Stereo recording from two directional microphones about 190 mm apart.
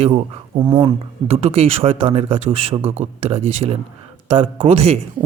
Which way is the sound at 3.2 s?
30° right (ahead or behind).